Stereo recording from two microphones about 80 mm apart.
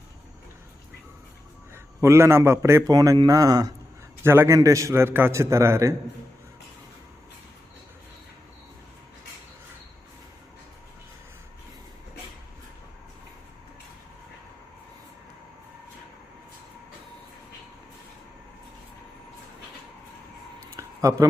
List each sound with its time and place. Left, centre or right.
1.7 s a man's voice: right
2.8 s speech: right
4.2 s a man's voice: right
20.7 s a sound: right